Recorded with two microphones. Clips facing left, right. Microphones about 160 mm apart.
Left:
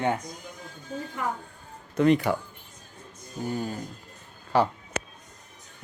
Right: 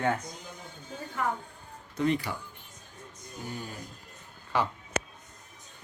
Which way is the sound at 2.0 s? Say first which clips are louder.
Left 7 dB; 70° left (ahead or behind).